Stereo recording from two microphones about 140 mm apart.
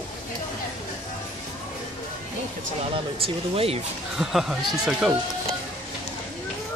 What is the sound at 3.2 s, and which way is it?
Speech, 45° right (ahead or behind).